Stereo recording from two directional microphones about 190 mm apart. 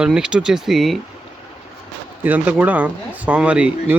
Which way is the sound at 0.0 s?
5° right (ahead or behind).